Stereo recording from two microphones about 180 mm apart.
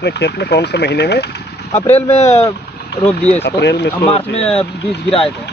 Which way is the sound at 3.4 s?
70° left (ahead or behind).